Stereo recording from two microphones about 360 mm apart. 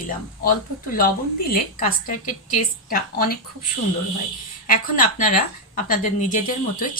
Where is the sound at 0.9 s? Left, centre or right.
Left.